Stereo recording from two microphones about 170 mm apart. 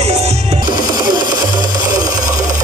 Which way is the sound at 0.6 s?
25° right (ahead or behind).